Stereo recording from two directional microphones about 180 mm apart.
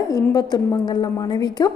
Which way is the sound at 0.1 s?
20° left (ahead or behind).